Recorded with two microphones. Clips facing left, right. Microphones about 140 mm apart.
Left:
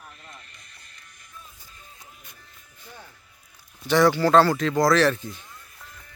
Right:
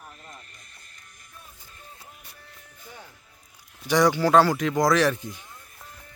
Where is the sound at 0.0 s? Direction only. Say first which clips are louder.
Right 1 dB; 40° right (ahead or behind).